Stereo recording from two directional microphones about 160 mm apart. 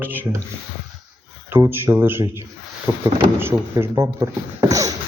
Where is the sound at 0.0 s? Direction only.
10° right (ahead or behind).